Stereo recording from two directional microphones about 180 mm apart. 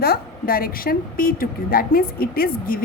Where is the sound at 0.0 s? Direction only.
60° left (ahead or behind).